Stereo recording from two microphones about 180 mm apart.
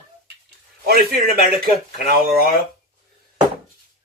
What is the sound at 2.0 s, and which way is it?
Speech, 55° right (ahead or behind).